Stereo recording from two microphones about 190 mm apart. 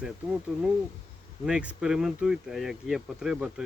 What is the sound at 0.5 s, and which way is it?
Speech, 5° right (ahead or behind).